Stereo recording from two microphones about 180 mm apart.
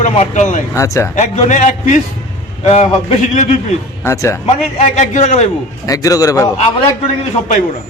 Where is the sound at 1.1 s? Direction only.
40° left (ahead or behind).